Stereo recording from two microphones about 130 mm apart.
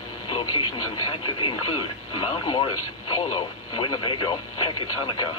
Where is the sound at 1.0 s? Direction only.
40° left (ahead or behind).